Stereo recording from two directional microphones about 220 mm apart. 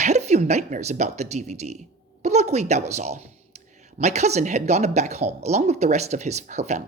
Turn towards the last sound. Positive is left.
turn(degrees=-30)  # may be behind; listen again after turning